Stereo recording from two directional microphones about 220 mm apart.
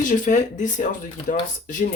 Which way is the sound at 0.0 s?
35° left (ahead or behind).